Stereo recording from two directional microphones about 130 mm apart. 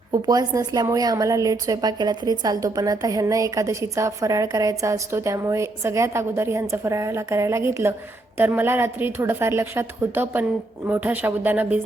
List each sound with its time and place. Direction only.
0.1 s a woman's voice: 30° right (ahead or behind); by 11.8 s 15° right (ahead or behind)